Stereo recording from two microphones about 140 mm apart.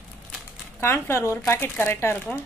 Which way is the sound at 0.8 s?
20° left (ahead or behind).